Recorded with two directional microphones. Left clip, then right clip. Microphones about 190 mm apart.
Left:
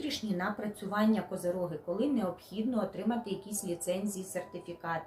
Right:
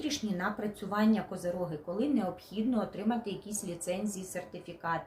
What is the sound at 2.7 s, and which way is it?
Speech, 15° right (ahead or behind).